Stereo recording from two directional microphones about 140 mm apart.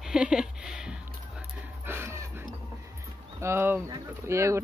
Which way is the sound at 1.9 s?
20° right (ahead or behind).